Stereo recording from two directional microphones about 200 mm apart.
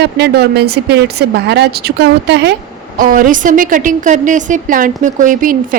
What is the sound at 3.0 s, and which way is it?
A woman's voice, 45° right (ahead or behind).